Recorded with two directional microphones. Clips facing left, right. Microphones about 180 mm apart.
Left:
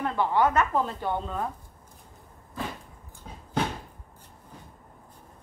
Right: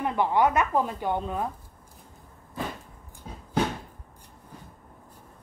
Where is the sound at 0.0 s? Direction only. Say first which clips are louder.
Right 1 dB; 15° right (ahead or behind).